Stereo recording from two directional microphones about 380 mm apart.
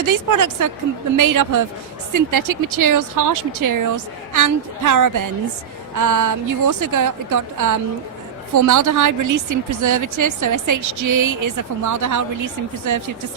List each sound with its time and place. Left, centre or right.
0.0 s speech: right